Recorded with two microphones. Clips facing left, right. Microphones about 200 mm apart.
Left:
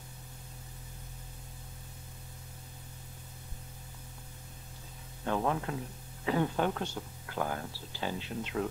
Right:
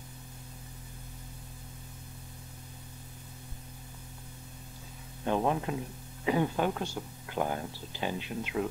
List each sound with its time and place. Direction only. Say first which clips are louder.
5.2 s speech: right 3 dB; 20° right (ahead or behind)